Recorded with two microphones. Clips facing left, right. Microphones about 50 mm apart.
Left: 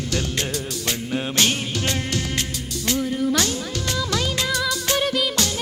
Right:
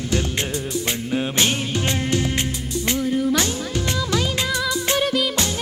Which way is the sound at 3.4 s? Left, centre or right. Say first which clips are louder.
Right 1 dB; right.